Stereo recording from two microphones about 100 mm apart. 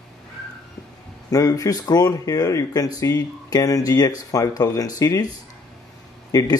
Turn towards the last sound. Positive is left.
turn(degrees=40)  # may be behind; listen again after turning